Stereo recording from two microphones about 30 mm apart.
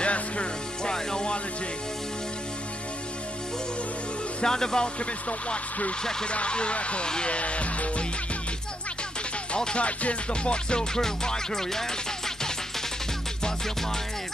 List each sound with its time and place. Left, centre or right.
0.0 s music: left
4.4 s speech: left
6.3 s speech: left
7.2 s music: left
9.8 s music: left
10.3 s speech: left
11.0 s music: centre